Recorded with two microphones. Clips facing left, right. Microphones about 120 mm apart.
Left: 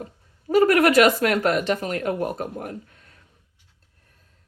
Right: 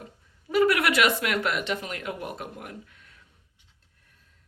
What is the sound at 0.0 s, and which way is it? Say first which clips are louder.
Speech: left 8 dB; 40° left (ahead or behind).